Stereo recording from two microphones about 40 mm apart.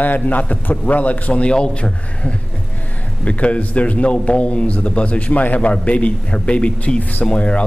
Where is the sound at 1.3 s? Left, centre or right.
Left.